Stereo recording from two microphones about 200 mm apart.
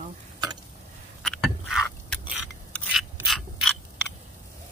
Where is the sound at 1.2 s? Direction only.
Centre (ahead or behind).